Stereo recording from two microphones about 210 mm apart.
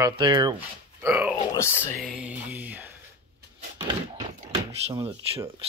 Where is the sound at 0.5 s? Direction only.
10° right (ahead or behind).